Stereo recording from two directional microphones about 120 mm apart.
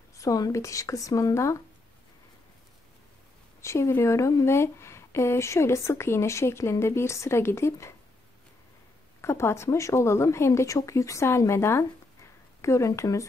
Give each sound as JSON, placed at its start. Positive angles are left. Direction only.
{"t": 0.1, "sound": "speech", "side_deg": 30}
{"t": 3.6, "sound": "speech", "side_deg": 25}
{"t": 9.2, "sound": "speech", "side_deg": 20}